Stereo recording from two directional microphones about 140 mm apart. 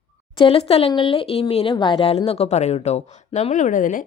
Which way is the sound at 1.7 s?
35° left (ahead or behind).